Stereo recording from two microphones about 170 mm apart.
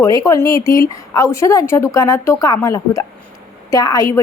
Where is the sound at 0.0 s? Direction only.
20° left (ahead or behind).